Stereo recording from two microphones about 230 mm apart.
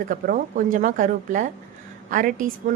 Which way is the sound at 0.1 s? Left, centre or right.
Right.